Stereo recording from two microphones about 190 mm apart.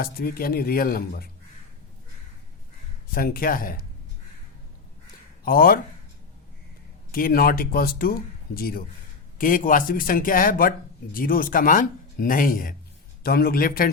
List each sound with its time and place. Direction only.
0.0 s speech: 50° left (ahead or behind)
3.1 s speech: 50° left (ahead or behind)
5.5 s speech: 50° left (ahead or behind)
7.1 s speech: 50° left (ahead or behind)